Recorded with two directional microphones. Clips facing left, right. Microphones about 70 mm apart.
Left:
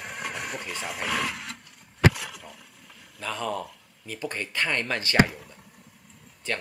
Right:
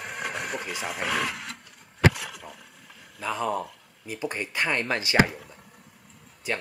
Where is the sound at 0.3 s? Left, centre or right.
Right.